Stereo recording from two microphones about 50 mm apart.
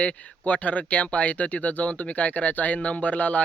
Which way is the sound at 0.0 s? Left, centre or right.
Left.